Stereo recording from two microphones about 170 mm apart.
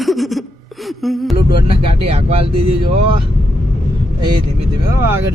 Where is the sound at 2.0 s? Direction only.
35° right (ahead or behind).